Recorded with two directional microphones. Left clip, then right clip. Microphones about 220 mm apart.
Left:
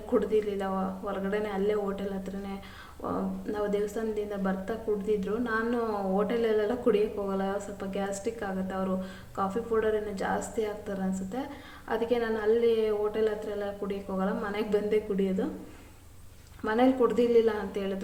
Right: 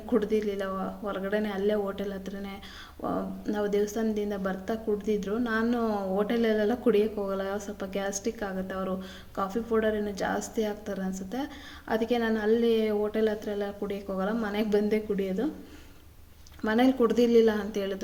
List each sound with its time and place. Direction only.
0.1 s a woman's voice: 45° right (ahead or behind)
16.6 s a woman's voice: 45° right (ahead or behind)